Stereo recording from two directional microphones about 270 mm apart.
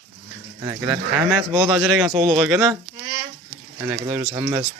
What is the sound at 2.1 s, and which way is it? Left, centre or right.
Speech, right.